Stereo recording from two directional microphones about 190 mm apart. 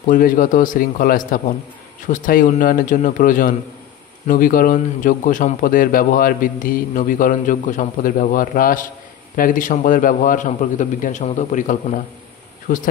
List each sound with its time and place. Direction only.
0.0 s a man's voice: 45° left (ahead or behind)